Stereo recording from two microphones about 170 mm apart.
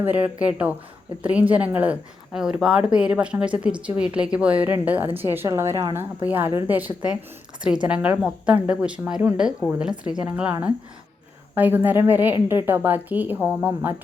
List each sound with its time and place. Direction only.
0.0 s a woman's voice: 10° right (ahead or behind)